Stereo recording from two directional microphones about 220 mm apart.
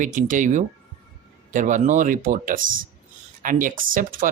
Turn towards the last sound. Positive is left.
turn(degrees=-40)  # may be behind; listen again after turning